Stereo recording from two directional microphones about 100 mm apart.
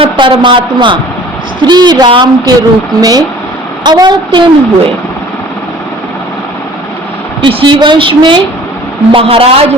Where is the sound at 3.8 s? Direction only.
45° right (ahead or behind).